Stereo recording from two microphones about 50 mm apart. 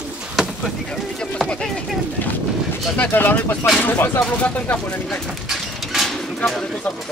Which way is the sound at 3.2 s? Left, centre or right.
Left.